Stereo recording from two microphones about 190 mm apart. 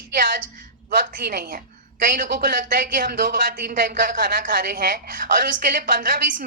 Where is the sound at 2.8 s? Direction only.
50° right (ahead or behind).